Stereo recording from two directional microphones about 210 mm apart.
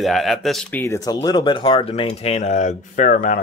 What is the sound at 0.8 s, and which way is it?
Speech, 15° left (ahead or behind).